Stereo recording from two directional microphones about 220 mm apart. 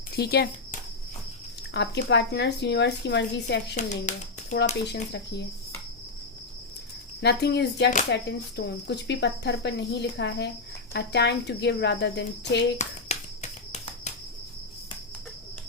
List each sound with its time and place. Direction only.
0.2 s speech: 45° left (ahead or behind)
3.8 s speech: 35° left (ahead or behind)
4.9 s speech: 50° left (ahead or behind)
7.2 s speech: 50° left (ahead or behind)
12.8 s music: 30° left (ahead or behind)